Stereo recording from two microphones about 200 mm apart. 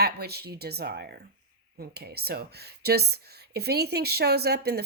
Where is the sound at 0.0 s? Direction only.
55° right (ahead or behind).